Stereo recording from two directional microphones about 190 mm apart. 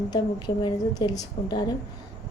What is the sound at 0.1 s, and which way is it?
Speech, 20° left (ahead or behind).